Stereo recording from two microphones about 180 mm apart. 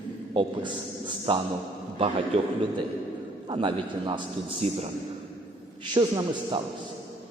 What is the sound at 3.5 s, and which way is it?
A man's voice, 30° right (ahead or behind).